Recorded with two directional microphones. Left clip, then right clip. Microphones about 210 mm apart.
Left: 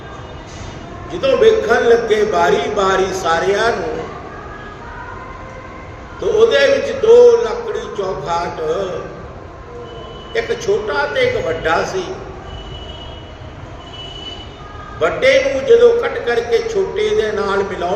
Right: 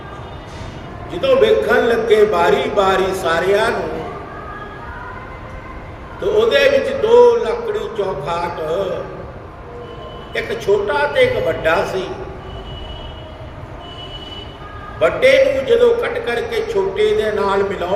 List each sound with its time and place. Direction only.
1.2 s a man's voice: 5° left (ahead or behind)
6.3 s a man's voice: 5° left (ahead or behind)
10.3 s a man's voice: 5° left (ahead or behind)
15.0 s a man's voice: 5° left (ahead or behind)